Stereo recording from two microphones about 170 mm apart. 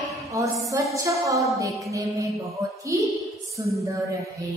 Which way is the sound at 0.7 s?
20° right (ahead or behind).